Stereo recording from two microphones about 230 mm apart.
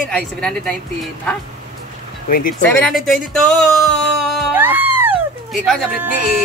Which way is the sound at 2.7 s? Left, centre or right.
Centre.